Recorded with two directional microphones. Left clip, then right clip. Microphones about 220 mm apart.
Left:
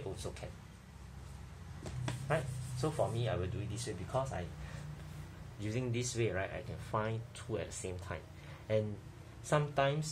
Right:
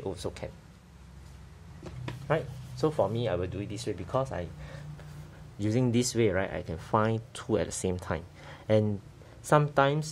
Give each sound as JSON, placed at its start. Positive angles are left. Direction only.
{"t": 0.1, "sound": "speech", "side_deg": -50}
{"t": 2.2, "sound": "speech", "side_deg": -45}
{"t": 5.6, "sound": "speech", "side_deg": -45}